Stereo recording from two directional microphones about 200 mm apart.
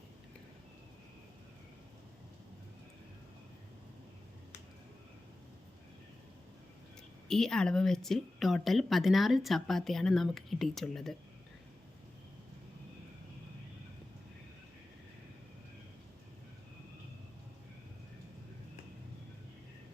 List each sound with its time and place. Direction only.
7.3 s speech: centre (ahead or behind)